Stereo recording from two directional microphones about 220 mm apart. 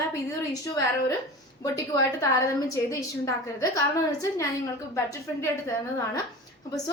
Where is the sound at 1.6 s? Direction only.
15° left (ahead or behind).